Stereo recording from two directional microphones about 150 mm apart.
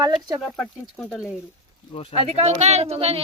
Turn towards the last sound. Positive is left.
turn(degrees=-45)  # may be behind; listen again after turning